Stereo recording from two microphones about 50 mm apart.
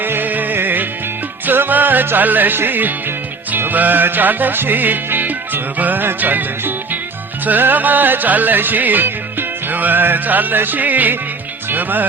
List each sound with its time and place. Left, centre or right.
0.0 s music: right